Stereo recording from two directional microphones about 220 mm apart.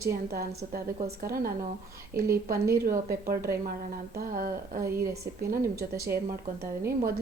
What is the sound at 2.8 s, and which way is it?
Speech, 40° right (ahead or behind).